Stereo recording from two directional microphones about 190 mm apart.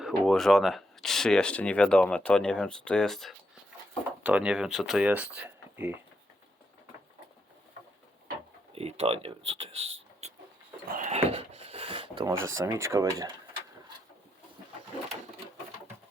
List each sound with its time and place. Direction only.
0.0 s speech: centre (ahead or behind)
8.7 s speech: 35° right (ahead or behind)
10.2 s vehicle: 35° right (ahead or behind)
10.8 s dog: 45° right (ahead or behind)
12.1 s speech: 20° right (ahead or behind)